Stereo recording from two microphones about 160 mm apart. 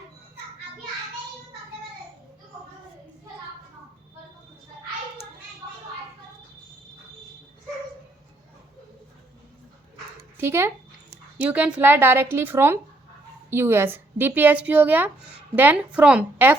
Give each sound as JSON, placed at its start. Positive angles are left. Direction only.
{"t": 10.3, "sound": "speech", "side_deg": -15}